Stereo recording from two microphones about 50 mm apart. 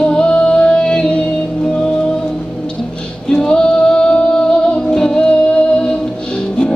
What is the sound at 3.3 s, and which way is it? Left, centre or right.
Music, centre.